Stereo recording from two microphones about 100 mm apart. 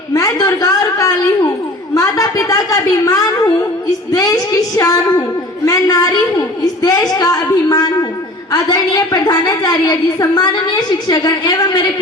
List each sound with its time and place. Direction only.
0.1 s a woman's voice: 40° left (ahead or behind)
8.5 s a woman's voice: 40° left (ahead or behind)